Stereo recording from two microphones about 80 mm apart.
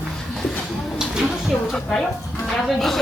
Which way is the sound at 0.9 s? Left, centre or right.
Centre.